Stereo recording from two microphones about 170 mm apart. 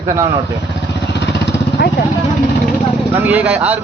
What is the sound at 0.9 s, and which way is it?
Vehicle, 85° left.